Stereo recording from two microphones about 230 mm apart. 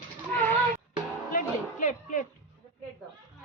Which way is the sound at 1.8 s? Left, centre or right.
Left.